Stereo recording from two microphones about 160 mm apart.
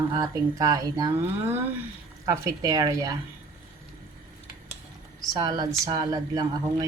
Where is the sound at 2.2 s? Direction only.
20° right (ahead or behind).